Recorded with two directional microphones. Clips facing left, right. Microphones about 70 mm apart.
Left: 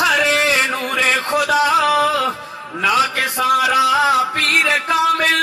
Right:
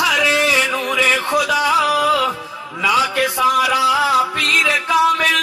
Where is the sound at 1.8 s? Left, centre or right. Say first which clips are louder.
Left 1 dB; left.